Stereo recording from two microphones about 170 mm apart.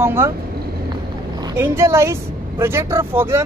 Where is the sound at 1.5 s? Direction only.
15° right (ahead or behind).